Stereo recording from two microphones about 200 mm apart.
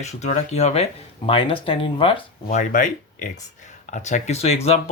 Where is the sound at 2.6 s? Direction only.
40° left (ahead or behind).